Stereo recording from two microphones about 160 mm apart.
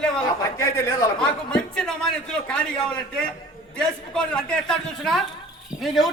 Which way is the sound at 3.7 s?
5° left (ahead or behind).